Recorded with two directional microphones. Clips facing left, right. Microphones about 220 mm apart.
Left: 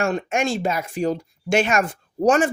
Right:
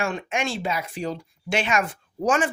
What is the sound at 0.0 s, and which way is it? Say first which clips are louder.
Speech: left 5 dB; 45° left (ahead or behind).